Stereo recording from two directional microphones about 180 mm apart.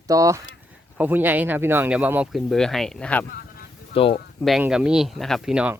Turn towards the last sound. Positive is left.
turn(degrees=-5)  # may be behind; listen again after turning